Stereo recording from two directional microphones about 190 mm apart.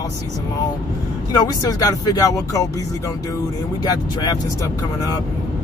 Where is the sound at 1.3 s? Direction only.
20° left (ahead or behind).